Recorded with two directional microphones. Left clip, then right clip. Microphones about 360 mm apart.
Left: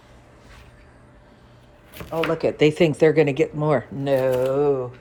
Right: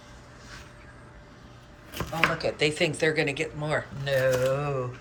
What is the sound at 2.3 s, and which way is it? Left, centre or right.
Speech, centre.